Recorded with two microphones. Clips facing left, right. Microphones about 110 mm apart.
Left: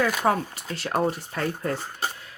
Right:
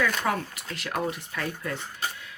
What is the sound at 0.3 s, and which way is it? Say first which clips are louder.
Speech: left 5 dB; 35° left (ahead or behind).